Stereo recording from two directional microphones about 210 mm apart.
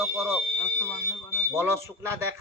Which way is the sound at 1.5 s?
10° right (ahead or behind).